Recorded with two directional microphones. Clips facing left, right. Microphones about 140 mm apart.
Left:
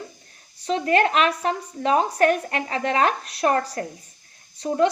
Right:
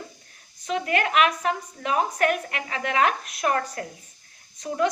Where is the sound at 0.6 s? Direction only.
35° left (ahead or behind).